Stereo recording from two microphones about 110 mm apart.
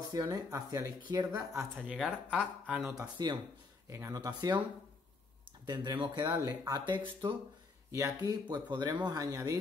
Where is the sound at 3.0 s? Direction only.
40° right (ahead or behind).